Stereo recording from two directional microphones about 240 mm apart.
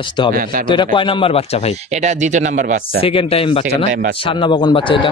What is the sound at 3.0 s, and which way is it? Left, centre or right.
Speech, left.